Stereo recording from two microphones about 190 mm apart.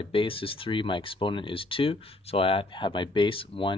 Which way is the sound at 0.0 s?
25° left (ahead or behind).